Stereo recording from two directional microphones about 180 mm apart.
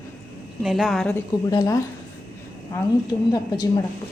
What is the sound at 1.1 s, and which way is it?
Speech, 15° left (ahead or behind).